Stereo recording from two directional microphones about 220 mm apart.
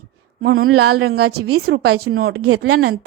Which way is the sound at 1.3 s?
80° right.